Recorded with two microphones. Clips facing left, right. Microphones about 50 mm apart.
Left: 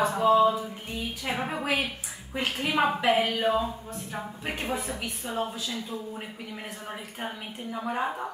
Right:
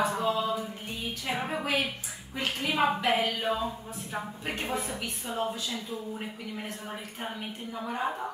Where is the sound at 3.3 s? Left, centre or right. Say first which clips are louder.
Left 5 dB; centre.